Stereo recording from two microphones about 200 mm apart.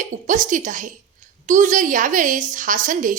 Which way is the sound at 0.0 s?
40° right (ahead or behind).